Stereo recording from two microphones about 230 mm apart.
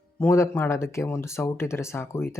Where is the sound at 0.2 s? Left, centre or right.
Centre.